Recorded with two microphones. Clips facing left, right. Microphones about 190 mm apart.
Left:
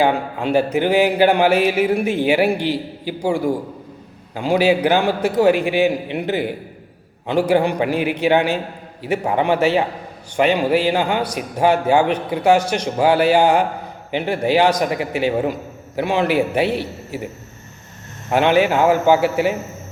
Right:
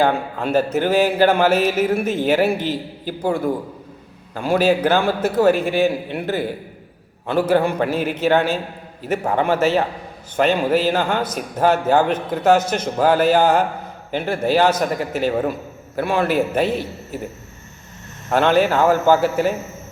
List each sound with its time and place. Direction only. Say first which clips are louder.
0.0 s speech: left 1 dB; 15° left (ahead or behind)
18.3 s speech: left 1 dB; 15° left (ahead or behind)